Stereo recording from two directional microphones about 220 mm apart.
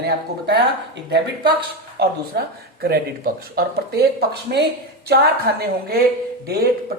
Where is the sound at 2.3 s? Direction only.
50° right (ahead or behind).